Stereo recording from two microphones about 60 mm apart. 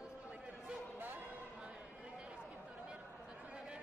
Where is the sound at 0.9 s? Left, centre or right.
Right.